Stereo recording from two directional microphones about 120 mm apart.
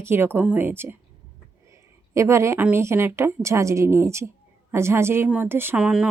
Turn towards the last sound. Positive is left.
turn(degrees=-5)  # may be behind; listen again after turning